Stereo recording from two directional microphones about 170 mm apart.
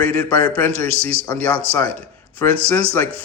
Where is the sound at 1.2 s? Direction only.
10° left (ahead or behind).